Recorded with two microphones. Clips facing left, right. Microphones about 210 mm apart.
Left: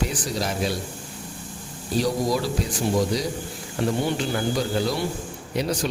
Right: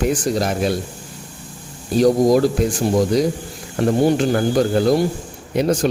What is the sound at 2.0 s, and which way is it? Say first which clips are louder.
Speech: right 10 dB; 50° right (ahead or behind).